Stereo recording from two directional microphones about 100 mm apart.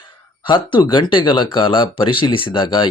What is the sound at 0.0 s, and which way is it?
Speech, 55° left (ahead or behind).